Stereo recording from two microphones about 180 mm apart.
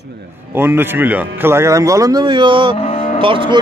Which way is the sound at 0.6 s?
10° right (ahead or behind).